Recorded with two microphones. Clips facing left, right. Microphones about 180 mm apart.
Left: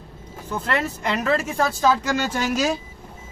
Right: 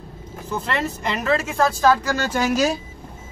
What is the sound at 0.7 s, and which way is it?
Speech, 5° left (ahead or behind).